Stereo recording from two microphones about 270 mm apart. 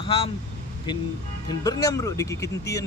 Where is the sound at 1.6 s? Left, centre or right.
Centre.